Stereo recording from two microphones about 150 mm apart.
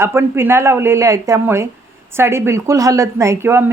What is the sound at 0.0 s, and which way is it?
Speech, 15° right (ahead or behind).